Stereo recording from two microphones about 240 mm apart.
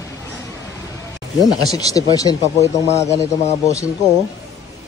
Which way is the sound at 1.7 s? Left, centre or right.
Centre.